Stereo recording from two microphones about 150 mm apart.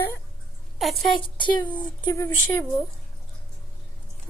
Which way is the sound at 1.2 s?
30° left (ahead or behind).